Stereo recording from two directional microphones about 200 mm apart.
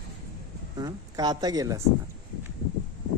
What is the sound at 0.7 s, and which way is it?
A woman's voice, 20° right (ahead or behind).